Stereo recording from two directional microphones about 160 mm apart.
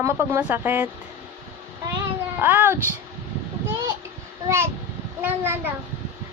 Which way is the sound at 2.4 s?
10° right (ahead or behind).